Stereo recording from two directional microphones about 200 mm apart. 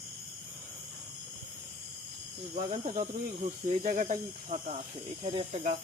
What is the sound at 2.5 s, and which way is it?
Speech, 35° right (ahead or behind).